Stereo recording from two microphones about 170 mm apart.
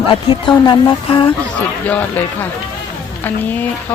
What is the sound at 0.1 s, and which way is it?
Speech, 25° left (ahead or behind).